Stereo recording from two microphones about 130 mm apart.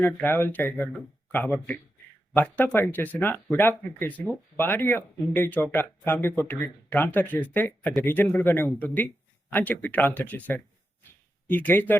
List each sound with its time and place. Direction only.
0.0 s speech: 15° left (ahead or behind)